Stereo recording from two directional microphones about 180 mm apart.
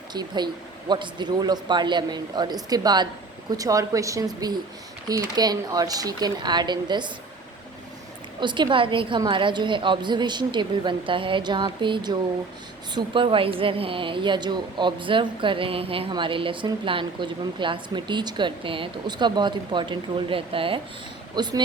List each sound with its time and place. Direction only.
0.1 s speech: 25° right (ahead or behind)
8.4 s speech: 25° right (ahead or behind)